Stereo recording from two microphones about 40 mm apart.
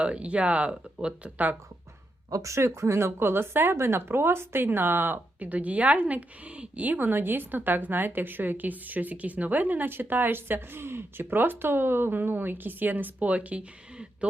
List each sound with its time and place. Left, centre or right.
0.0 s a woman's voice: right
2.6 s speech: right
5.4 s a woman's voice: right
7.1 s a woman's voice: right